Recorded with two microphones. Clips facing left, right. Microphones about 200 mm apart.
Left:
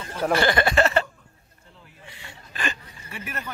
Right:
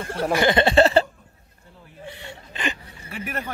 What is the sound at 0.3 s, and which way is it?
Speech, 20° right (ahead or behind).